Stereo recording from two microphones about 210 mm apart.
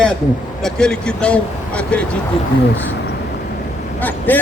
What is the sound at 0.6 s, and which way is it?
Speech, 5° left (ahead or behind).